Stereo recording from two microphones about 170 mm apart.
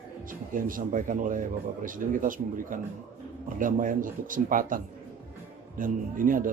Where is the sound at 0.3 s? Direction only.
55° right (ahead or behind).